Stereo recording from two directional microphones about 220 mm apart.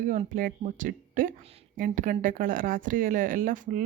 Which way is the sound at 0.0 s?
35° right (ahead or behind).